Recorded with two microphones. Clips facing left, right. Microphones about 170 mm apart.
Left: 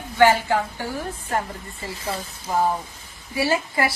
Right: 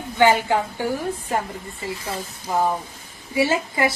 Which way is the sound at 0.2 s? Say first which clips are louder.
Even; 20° right (ahead or behind).